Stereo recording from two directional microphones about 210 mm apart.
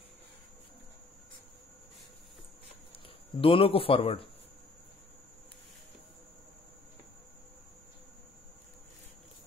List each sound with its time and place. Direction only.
2.9 s speech: 25° left (ahead or behind)